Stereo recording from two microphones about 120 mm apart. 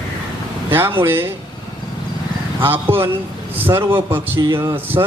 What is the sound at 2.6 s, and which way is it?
A man's voice, 20° right (ahead or behind).